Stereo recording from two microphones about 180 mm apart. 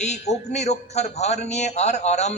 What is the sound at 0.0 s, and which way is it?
A man's voice, 40° left (ahead or behind).